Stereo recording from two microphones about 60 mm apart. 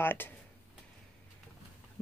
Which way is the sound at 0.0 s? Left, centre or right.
Left.